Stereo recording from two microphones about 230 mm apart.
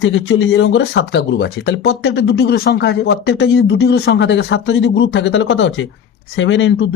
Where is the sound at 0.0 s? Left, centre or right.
Left.